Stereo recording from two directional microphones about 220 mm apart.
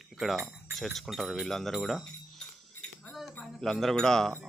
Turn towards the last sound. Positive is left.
turn(degrees=0)  # may be behind; listen again after turning